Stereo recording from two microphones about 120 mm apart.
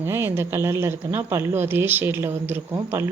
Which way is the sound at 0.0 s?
20° right (ahead or behind).